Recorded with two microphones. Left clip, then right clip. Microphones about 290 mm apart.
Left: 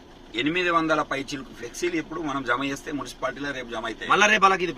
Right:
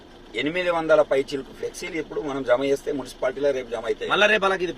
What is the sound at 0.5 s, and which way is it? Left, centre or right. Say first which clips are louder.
Speech: right 4 dB; centre.